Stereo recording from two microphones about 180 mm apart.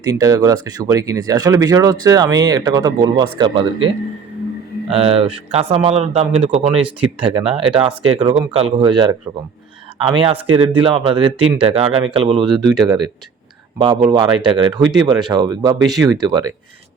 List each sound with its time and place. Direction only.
0.0 s speech: 20° right (ahead or behind)
4.9 s speech: 35° right (ahead or behind)
13.7 s speech: 25° right (ahead or behind)